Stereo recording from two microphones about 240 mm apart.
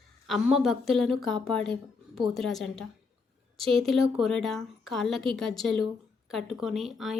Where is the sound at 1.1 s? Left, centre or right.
Centre.